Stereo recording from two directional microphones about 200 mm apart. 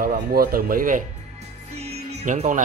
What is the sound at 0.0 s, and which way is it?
Speech, 50° right (ahead or behind).